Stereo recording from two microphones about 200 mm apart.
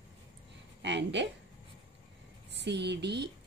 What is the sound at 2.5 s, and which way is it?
Speech, 60° right (ahead or behind).